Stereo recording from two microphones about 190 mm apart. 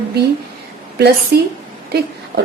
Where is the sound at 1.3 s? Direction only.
55° right (ahead or behind).